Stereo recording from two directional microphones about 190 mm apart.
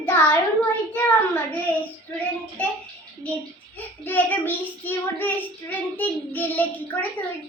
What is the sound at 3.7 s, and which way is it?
A child's voice, 10° left (ahead or behind).